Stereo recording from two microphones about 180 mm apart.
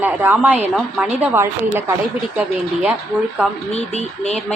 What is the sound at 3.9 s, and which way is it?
Speech, 35° left (ahead or behind).